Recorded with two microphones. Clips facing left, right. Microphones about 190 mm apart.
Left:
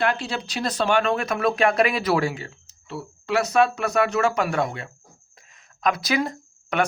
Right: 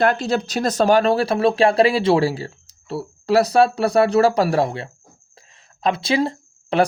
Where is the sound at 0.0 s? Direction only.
40° right (ahead or behind).